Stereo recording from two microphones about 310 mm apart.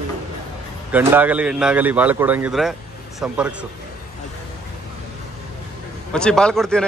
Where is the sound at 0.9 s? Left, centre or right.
Centre.